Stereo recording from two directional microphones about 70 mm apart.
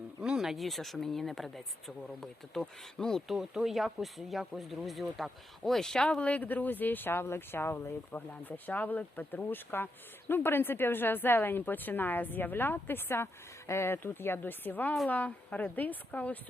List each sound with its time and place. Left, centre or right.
0.2 s speech: centre
3.2 s speech: centre; by 16.4 s left